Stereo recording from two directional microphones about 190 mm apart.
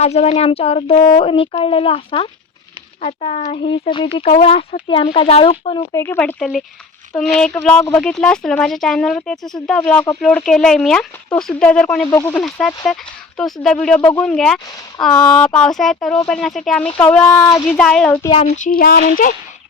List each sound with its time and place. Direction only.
0.0 s speech: 35° left (ahead or behind)
5.9 s speech: 10° left (ahead or behind)
17.7 s speech: 5° left (ahead or behind)
18.3 s speech: 40° left (ahead or behind)